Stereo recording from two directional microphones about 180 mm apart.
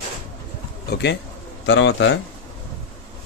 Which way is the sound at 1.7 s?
90° left.